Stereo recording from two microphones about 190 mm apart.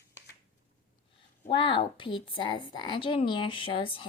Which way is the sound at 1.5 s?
25° left (ahead or behind).